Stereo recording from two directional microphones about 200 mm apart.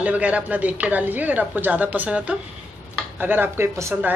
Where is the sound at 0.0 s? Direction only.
5° right (ahead or behind).